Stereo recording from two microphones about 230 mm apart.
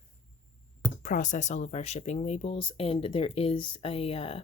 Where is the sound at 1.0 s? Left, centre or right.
Left.